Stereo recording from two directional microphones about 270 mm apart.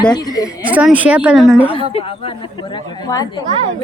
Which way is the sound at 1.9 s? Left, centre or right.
Centre.